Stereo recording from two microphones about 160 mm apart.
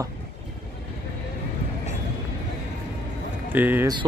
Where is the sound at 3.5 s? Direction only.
10° right (ahead or behind).